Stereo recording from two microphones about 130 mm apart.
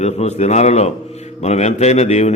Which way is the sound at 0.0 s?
55° left (ahead or behind).